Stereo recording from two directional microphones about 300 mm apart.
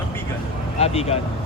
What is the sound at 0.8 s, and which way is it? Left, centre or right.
Speech, centre.